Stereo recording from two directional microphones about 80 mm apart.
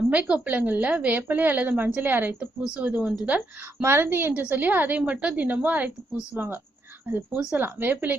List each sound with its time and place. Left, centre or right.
0.1 s a woman's voice: centre
3.8 s a woman's voice: right